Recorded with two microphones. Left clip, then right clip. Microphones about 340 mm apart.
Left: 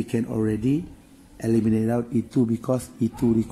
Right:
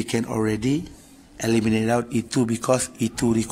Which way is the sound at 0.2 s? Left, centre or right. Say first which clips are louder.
Right 1 dB; right.